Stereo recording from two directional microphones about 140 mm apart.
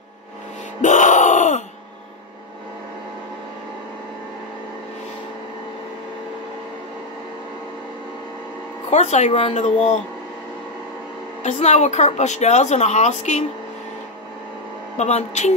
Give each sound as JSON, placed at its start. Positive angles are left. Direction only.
{"t": 0.8, "sound": "groan", "side_deg": 60}
{"t": 8.9, "sound": "a woman's voice", "side_deg": 55}
{"t": 11.4, "sound": "a woman's voice", "side_deg": 55}
{"t": 15.0, "sound": "speech", "side_deg": 55}